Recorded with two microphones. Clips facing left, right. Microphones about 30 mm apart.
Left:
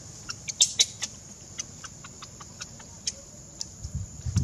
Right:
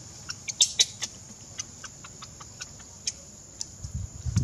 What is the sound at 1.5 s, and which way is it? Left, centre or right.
Chicken, centre.